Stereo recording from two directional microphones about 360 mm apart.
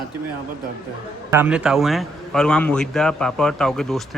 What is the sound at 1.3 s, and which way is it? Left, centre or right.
A man's voice, centre.